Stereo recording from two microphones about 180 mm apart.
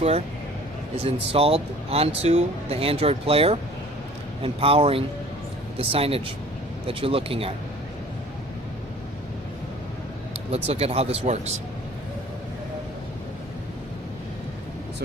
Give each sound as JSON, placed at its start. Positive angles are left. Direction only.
{"t": 1.0, "sound": "speech", "side_deg": -30}
{"t": 10.5, "sound": "speech", "side_deg": -35}